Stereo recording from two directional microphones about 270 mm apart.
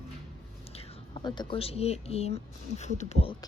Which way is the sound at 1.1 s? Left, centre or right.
Centre.